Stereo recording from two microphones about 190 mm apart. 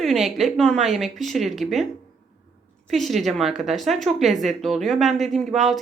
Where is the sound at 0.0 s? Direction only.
Centre (ahead or behind).